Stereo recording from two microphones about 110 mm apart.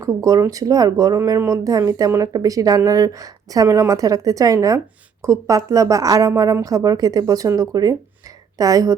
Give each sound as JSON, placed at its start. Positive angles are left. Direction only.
{"t": 0.0, "sound": "speech", "side_deg": -30}